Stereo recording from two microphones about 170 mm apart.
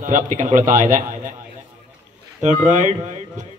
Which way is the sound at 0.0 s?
50° right (ahead or behind).